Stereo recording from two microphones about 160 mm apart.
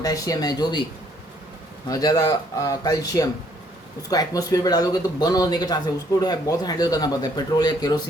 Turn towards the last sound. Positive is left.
turn(degrees=25)  # may be behind; listen again after turning